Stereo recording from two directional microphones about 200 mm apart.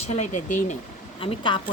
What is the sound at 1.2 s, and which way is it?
Speech, 25° left (ahead or behind).